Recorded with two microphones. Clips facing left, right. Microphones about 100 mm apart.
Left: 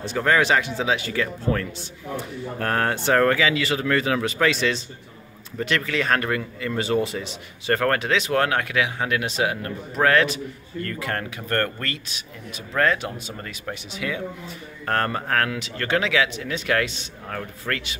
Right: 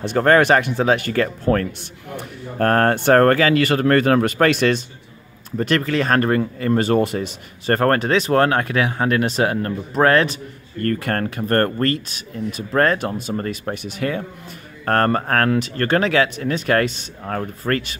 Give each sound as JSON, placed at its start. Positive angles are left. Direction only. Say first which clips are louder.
{"t": 0.0, "sound": "speech", "louder": "right 6 dB", "side_deg": -55}
{"t": 5.6, "sound": "speech", "louder": "right 5 dB", "side_deg": -40}
{"t": 10.8, "sound": "speech", "louder": "right 7 dB", "side_deg": -50}